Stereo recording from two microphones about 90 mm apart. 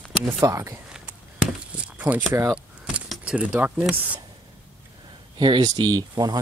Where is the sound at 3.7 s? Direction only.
10° right (ahead or behind).